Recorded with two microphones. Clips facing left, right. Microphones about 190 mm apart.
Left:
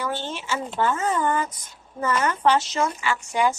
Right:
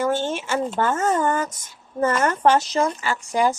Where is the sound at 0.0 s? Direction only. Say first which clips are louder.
Right 7 dB; 45° right (ahead or behind).